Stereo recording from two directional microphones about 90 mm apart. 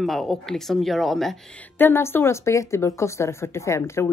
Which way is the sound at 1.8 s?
25° left (ahead or behind).